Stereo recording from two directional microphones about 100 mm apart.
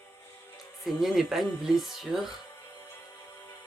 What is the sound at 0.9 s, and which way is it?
Speech, 5° right (ahead or behind).